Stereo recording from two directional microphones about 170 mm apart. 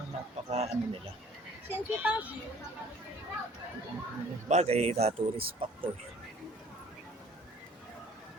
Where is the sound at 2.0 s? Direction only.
10° right (ahead or behind).